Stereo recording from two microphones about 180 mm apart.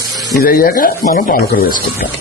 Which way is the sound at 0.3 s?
55° left (ahead or behind).